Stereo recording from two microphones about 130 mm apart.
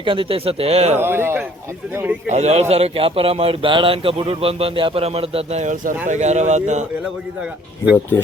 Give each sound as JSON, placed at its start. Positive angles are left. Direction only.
{"t": 0.0, "sound": "speech", "side_deg": -45}
{"t": 0.9, "sound": "a man's voice", "side_deg": -15}
{"t": 2.3, "sound": "speech", "side_deg": -60}